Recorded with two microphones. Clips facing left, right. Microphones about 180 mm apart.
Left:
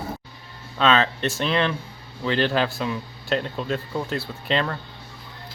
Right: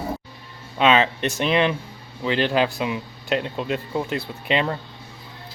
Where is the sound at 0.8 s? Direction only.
15° right (ahead or behind).